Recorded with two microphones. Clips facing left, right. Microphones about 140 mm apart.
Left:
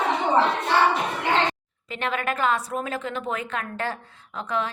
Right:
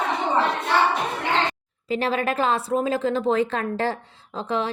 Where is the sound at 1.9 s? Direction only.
35° right (ahead or behind).